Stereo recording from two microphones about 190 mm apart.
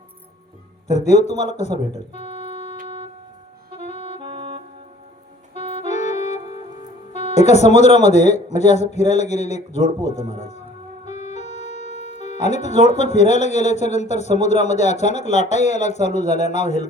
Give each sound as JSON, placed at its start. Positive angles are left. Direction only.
{"t": 0.9, "sound": "speech", "side_deg": 35}
{"t": 3.7, "sound": "saxophone", "side_deg": 40}
{"t": 4.2, "sound": "music", "side_deg": -30}
{"t": 5.5, "sound": "music", "side_deg": 35}
{"t": 7.1, "sound": "speech", "side_deg": 35}